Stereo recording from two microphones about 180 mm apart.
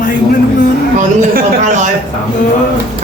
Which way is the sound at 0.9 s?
50° right (ahead or behind).